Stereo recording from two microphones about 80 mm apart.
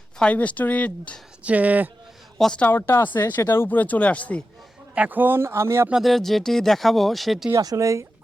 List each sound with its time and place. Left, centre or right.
0.2 s speech: centre
1.5 s speech: centre
2.4 s speech: centre
2.6 s speech: left
4.9 s speech: right
5.9 s speech: centre
7.6 s speech: right